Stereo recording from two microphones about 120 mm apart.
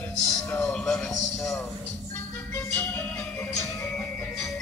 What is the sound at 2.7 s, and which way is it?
Music, 15° left (ahead or behind).